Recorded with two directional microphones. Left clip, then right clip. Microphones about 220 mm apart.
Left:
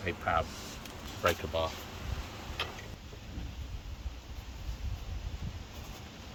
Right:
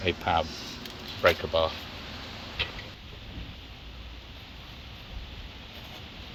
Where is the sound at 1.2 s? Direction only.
15° right (ahead or behind).